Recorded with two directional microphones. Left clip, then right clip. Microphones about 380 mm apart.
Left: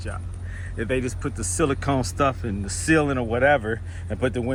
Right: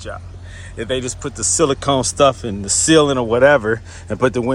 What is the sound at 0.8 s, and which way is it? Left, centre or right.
Speech, centre.